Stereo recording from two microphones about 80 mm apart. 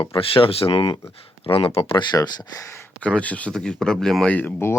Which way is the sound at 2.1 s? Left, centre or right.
Left.